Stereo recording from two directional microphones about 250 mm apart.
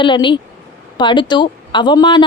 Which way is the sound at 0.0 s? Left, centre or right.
Centre.